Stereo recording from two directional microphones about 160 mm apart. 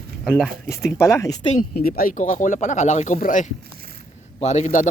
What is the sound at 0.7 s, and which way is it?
Speech, 20° left (ahead or behind).